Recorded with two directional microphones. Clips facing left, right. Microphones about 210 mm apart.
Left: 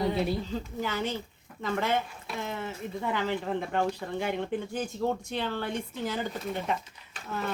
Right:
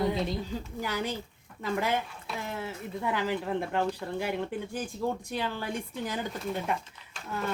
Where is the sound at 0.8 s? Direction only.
10° right (ahead or behind).